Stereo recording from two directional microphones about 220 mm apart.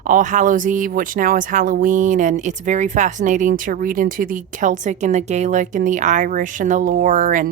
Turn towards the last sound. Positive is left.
turn(degrees=-35)  # may be behind; listen again after turning